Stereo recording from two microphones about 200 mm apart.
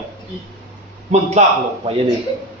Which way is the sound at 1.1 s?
35° right (ahead or behind).